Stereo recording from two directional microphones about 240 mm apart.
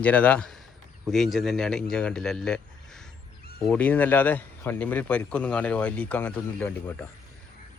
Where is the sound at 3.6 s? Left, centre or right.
Centre.